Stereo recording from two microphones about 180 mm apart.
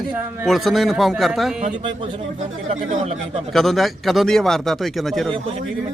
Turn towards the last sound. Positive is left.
turn(degrees=0)  # may be behind; listen again after turning